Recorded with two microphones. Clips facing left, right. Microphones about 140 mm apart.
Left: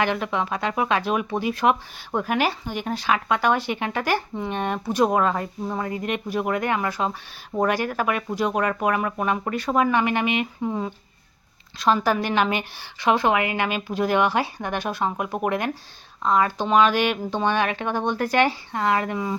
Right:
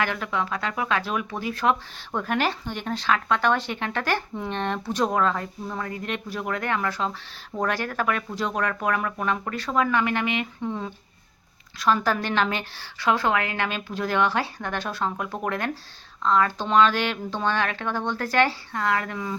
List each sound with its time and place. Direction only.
0.0 s speech: 20° left (ahead or behind)
11.8 s a woman's voice: 20° left (ahead or behind)